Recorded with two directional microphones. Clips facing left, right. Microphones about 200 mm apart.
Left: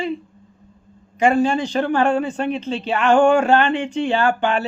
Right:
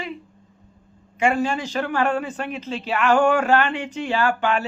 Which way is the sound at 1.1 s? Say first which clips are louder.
Left 5 dB; 35° left (ahead or behind).